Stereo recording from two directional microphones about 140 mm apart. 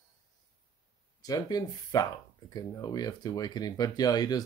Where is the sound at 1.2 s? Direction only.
30° left (ahead or behind).